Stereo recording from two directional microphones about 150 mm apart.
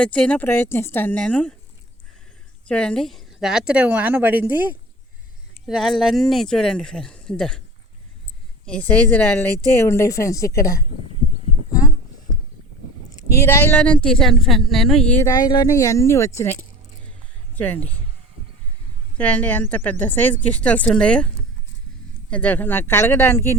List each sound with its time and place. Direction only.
0.0 s speech: 5° left (ahead or behind)
2.6 s a woman's voice: 5° left (ahead or behind); by 4.7 s 15° right (ahead or behind)
5.6 s a woman's voice: centre (ahead or behind)
8.6 s speech: 10° left (ahead or behind)
13.3 s a woman's voice: 15° left (ahead or behind)
15.3 s speech: 25° left (ahead or behind); by 17.9 s 10° left (ahead or behind)
19.1 s speech: 10° left (ahead or behind)
22.3 s speech: 10° left (ahead or behind)